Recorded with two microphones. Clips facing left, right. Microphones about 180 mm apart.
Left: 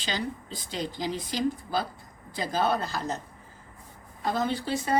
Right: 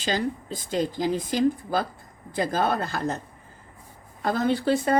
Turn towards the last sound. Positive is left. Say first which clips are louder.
# right 5 dB
turn(degrees=-55)  # may be behind; listen again after turning